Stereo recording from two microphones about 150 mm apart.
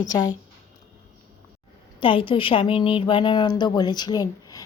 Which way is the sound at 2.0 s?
35° left (ahead or behind).